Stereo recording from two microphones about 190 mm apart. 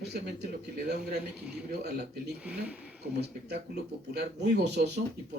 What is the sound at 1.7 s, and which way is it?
Speech, 60° right (ahead or behind).